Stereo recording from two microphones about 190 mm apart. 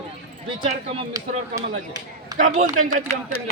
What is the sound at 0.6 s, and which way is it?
Speech, 30° right (ahead or behind).